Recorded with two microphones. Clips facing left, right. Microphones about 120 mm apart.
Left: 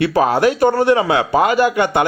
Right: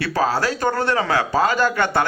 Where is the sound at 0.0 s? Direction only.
20° left (ahead or behind).